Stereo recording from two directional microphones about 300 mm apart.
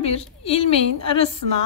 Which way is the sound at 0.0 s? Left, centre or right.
Centre.